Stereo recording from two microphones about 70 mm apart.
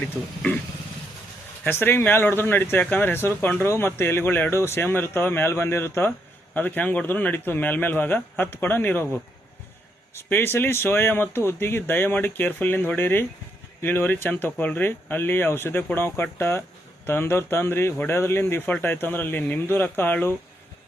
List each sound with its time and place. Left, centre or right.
0.0 s speech: left
1.6 s speech: left
10.2 s speech: left